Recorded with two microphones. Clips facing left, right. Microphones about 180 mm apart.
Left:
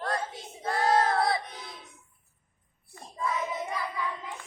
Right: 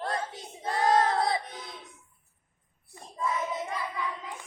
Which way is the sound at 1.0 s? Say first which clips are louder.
Even; 20° right (ahead or behind).